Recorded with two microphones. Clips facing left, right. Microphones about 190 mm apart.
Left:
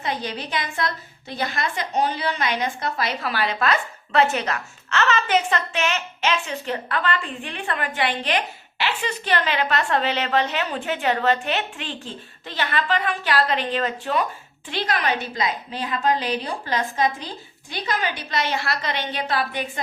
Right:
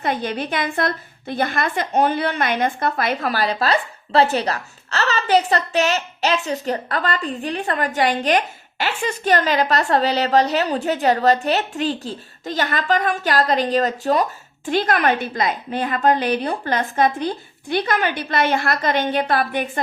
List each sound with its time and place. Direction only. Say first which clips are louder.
0.0 s a woman's voice: right 5 dB; 55° right (ahead or behind)